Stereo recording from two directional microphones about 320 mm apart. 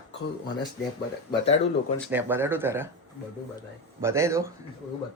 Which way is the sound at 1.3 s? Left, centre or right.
Centre.